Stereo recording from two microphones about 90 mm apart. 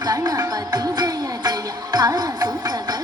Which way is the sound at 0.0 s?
45° right (ahead or behind).